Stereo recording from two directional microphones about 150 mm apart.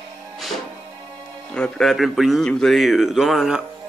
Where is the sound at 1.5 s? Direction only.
5° left (ahead or behind).